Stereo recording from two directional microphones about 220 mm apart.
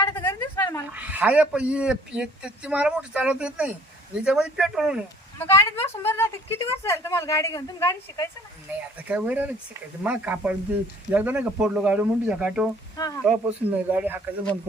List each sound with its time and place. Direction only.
0.0 s a sound: 10° left (ahead or behind)
0.9 s speech: 5° right (ahead or behind)
5.4 s speech: 10° left (ahead or behind)
9.0 s speech: 5° right (ahead or behind)
13.0 s speech: 15° left (ahead or behind)
13.4 s speech: 10° right (ahead or behind)